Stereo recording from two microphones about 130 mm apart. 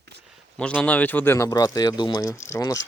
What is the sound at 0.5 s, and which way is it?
A man's voice, 5° left (ahead or behind).